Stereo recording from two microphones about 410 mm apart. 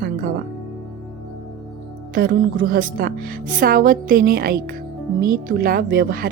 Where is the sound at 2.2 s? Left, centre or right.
Right.